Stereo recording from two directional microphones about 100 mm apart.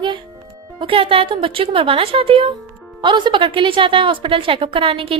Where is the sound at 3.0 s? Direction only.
50° right (ahead or behind).